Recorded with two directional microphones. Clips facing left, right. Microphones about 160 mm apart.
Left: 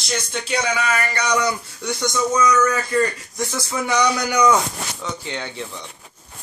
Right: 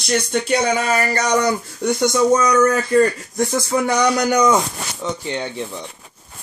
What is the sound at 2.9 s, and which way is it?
Speech, 40° right (ahead or behind).